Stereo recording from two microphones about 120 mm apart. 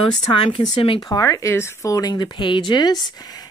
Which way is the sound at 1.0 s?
30° left (ahead or behind).